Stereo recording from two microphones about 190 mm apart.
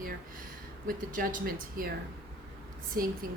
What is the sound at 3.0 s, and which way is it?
Speech, 50° right (ahead or behind).